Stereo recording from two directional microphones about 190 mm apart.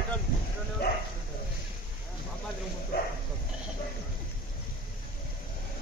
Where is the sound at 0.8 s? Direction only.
55° left (ahead or behind).